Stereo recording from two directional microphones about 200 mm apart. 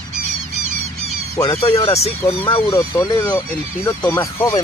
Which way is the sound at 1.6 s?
30° left (ahead or behind).